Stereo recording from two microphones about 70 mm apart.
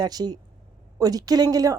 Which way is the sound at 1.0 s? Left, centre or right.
Right.